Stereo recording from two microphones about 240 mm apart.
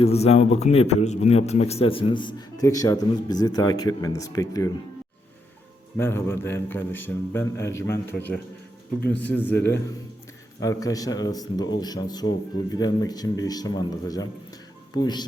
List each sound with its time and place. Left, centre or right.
0.0 s a man's voice: left
6.0 s a man's voice: centre